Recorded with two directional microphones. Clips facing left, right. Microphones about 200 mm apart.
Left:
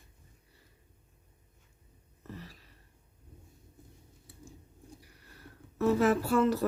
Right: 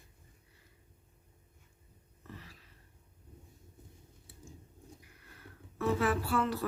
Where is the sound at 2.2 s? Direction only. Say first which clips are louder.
Left 5 dB; 40° left (ahead or behind).